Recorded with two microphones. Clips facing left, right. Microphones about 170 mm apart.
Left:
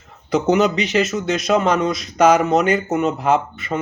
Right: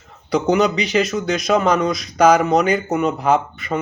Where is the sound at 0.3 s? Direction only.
5° left (ahead or behind).